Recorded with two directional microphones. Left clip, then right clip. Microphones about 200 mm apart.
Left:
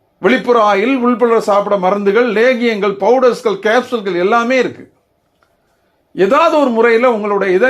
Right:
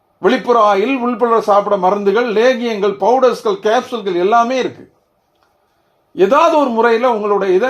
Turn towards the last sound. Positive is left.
turn(degrees=20)  # may be behind; listen again after turning